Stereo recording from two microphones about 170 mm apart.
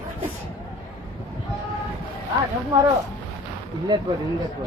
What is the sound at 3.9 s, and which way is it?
Speech, 25° right (ahead or behind).